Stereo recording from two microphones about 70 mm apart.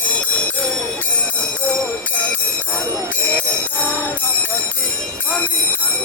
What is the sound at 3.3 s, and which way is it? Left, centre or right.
Music, left.